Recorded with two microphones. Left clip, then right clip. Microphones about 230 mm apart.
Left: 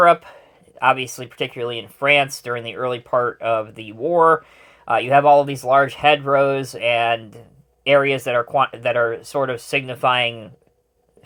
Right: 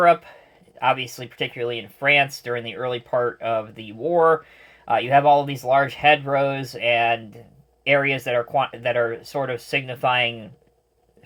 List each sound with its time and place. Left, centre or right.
0.0 s speech: left